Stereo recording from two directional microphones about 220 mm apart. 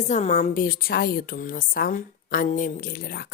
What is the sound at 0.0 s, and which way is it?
A woman's voice, 30° left (ahead or behind).